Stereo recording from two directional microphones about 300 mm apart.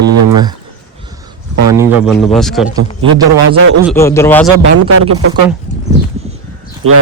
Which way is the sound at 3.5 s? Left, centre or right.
Right.